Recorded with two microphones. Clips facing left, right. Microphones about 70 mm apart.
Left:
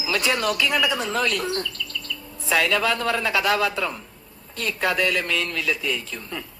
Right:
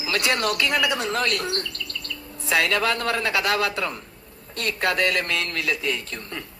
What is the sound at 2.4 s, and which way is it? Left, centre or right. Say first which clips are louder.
A woman's voice: left 1 dB; centre.